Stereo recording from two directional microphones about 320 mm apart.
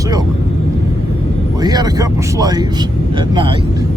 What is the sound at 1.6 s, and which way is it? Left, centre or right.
Speech, centre.